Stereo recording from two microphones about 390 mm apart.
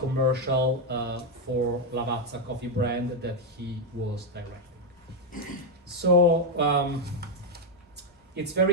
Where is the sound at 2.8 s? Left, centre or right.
Right.